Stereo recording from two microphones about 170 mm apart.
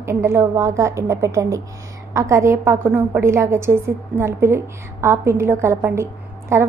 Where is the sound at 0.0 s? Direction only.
15° right (ahead or behind).